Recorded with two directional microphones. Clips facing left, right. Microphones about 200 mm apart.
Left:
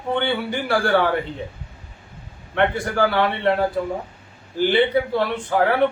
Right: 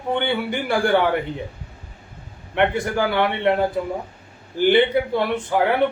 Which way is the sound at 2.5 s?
15° right (ahead or behind).